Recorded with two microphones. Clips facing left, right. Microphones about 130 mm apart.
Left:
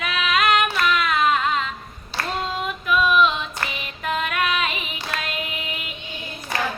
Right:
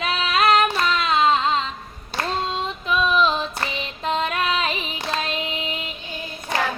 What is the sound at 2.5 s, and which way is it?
Child singing, 25° right (ahead or behind).